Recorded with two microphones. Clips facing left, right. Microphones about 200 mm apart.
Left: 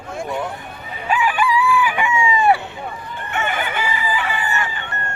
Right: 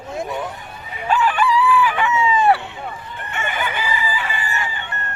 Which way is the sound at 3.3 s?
55° left (ahead or behind).